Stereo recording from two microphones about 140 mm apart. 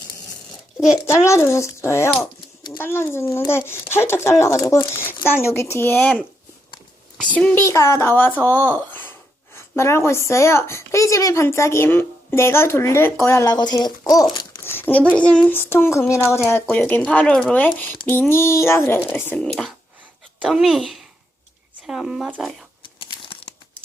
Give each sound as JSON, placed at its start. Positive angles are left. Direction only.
{"t": 1.0, "sound": "speech", "side_deg": 20}
{"t": 7.3, "sound": "speech", "side_deg": 10}
{"t": 7.6, "sound": "speech", "side_deg": 20}
{"t": 14.6, "sound": "a sound", "side_deg": 15}
{"t": 15.1, "sound": "speech", "side_deg": 10}
{"t": 19.5, "sound": "speech", "side_deg": 0}
{"t": 23.0, "sound": "crumpling", "side_deg": 35}